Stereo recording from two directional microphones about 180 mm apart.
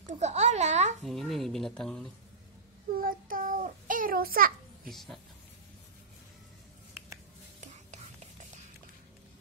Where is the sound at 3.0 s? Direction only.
50° right (ahead or behind).